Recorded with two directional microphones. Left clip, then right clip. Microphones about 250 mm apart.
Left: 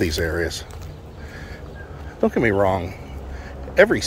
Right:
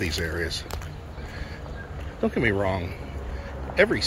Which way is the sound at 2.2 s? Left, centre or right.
Centre.